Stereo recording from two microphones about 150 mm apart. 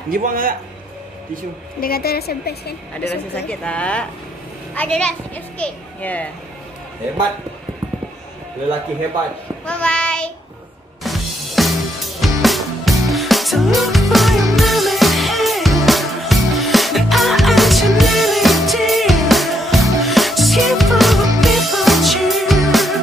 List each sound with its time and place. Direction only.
0.1 s a man's voice: 70° right (ahead or behind)
1.8 s a woman's voice: 85° left
3.4 s a child's voice: 5° left (ahead or behind)
9.7 s child singing: 5° left (ahead or behind)
11.1 s music: centre (ahead or behind)